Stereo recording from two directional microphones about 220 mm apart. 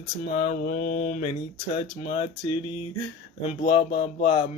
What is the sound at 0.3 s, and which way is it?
Speech, 30° left (ahead or behind).